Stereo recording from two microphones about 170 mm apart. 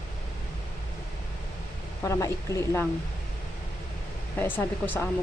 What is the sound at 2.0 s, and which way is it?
Speech, 15° left (ahead or behind).